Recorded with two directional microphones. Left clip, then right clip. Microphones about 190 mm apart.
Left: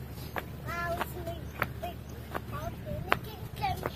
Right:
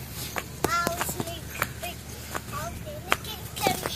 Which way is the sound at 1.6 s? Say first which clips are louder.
Right 3 dB; 15° right (ahead or behind).